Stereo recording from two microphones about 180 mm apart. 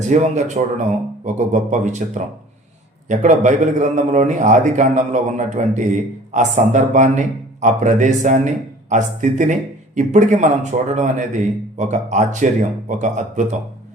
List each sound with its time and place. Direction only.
0.0 s a man's voice: 40° right (ahead or behind)